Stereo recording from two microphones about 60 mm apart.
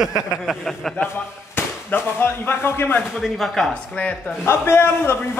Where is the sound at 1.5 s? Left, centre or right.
Left.